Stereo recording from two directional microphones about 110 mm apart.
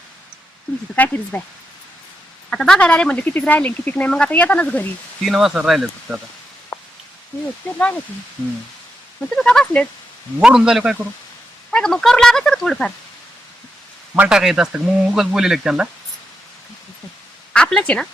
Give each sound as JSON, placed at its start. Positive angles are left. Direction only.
{"t": 0.9, "sound": "speech", "side_deg": 15}
{"t": 2.5, "sound": "speech", "side_deg": 5}
{"t": 5.2, "sound": "speech", "side_deg": 0}
{"t": 6.7, "sound": "a sound", "side_deg": 25}
{"t": 7.6, "sound": "speech", "side_deg": 15}
{"t": 9.3, "sound": "speech", "side_deg": 5}
{"t": 10.4, "sound": "speech", "side_deg": -5}
{"t": 11.7, "sound": "speech", "side_deg": 5}
{"t": 14.2, "sound": "speech", "side_deg": -5}
{"t": 17.5, "sound": "a woman's voice", "side_deg": 10}